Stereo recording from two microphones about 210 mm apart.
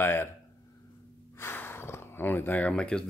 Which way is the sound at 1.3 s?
10° left (ahead or behind).